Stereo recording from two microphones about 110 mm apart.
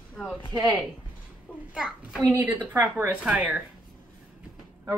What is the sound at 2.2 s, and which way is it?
Speech, 15° right (ahead or behind).